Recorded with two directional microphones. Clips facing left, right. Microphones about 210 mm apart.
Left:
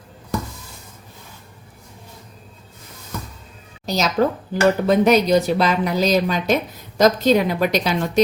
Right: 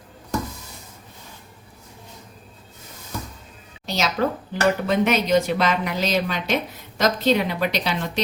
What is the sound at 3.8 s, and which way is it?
A woman's voice, 40° left (ahead or behind).